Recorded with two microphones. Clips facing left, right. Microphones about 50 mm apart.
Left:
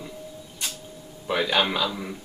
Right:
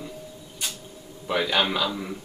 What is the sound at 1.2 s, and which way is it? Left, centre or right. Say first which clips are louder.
Speech: even; centre.